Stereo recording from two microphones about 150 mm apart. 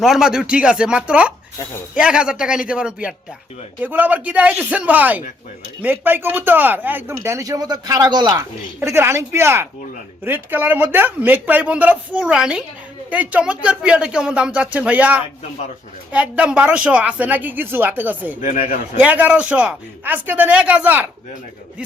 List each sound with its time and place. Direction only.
0.0 s speech: 5° right (ahead or behind)